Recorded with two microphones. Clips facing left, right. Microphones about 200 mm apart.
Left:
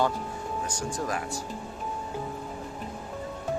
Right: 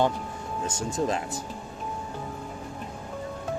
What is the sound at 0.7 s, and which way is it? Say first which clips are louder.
Speech: right 6 dB; 25° right (ahead or behind).